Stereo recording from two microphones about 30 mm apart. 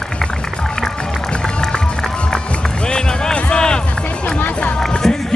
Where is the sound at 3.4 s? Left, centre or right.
Left.